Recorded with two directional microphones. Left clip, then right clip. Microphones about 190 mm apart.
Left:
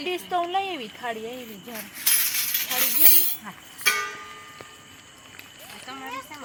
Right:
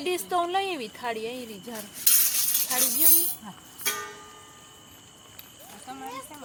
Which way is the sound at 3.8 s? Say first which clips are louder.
Left 8 dB; 50° right (ahead or behind).